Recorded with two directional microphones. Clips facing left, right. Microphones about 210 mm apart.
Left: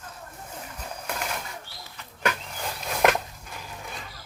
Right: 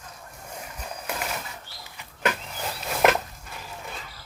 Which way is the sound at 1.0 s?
5° right (ahead or behind).